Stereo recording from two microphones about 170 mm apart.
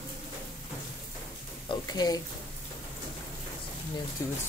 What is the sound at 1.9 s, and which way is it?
Speech, 20° left (ahead or behind).